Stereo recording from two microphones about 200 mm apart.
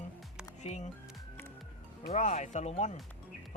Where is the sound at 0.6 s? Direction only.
35° left (ahead or behind).